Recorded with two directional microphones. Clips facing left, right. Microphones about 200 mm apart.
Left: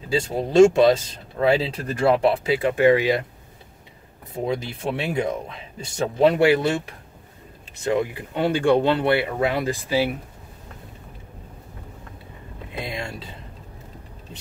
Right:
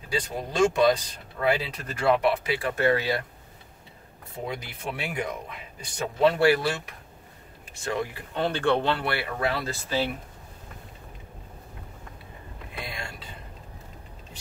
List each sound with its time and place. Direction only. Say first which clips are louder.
0.1 s speech: left 9 dB; 25° left (ahead or behind)
4.5 s speech: left 9 dB; 25° left (ahead or behind)
12.7 s vehicle: left 7 dB; 25° left (ahead or behind)